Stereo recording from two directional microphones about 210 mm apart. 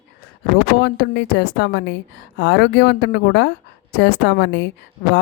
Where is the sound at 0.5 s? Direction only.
55° left (ahead or behind).